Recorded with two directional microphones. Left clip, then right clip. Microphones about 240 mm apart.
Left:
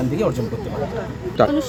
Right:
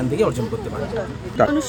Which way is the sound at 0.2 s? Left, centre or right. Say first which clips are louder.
Right 2 dB; centre.